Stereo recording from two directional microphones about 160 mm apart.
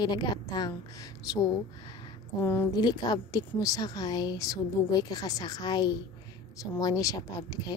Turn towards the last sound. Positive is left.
turn(degrees=25)  # may be behind; listen again after turning